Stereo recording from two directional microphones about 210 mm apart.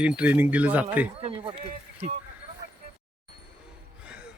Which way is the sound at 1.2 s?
25° right (ahead or behind).